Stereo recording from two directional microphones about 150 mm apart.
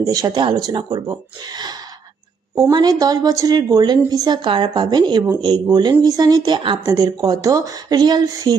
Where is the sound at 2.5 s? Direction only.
25° right (ahead or behind).